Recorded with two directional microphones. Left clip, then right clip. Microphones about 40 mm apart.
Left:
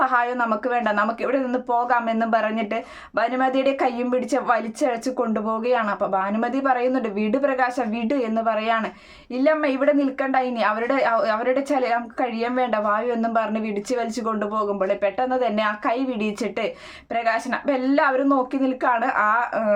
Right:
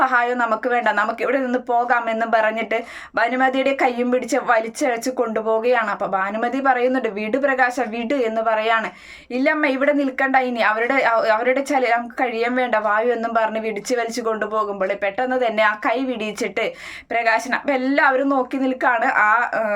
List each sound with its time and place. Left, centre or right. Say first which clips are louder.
0.0 s a woman's voice: right 3 dB; left